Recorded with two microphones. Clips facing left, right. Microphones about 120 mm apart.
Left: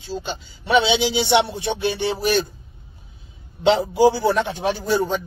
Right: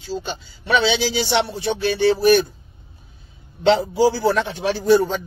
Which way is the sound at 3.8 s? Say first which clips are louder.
Left 1 dB; 25° left (ahead or behind).